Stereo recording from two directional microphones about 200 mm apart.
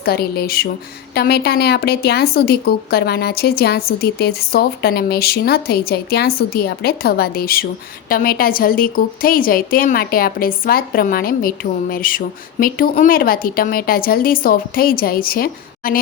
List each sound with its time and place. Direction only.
0.0 s a woman's voice: 50° left (ahead or behind)